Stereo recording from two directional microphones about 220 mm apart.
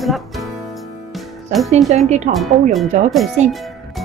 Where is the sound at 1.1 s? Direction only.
Centre (ahead or behind).